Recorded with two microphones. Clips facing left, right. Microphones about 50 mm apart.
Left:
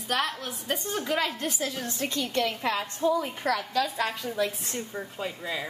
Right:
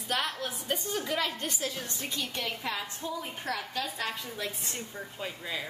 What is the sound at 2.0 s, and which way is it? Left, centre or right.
A woman's voice, left.